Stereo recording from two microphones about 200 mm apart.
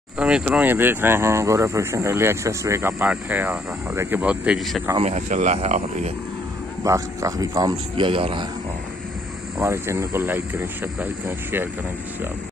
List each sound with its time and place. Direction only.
0.2 s speech: 5° right (ahead or behind)
4.9 s speech: 35° right (ahead or behind)
6.8 s speech: 15° right (ahead or behind)
9.6 s speech: 15° right (ahead or behind)